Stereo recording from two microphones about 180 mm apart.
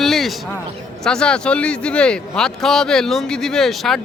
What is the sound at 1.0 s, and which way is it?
Speech, 5° left (ahead or behind).